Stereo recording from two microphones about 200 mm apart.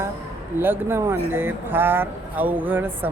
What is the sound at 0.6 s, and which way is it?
Speech, 10° right (ahead or behind).